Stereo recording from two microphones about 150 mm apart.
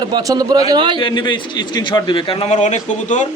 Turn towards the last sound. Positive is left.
turn(degrees=55)  # may be behind; listen again after turning